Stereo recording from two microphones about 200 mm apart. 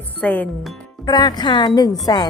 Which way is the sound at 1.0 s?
20° left (ahead or behind).